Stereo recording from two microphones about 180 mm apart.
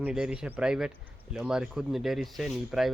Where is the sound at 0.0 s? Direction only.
5° right (ahead or behind).